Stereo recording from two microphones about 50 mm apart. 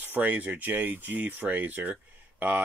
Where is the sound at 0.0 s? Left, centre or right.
Right.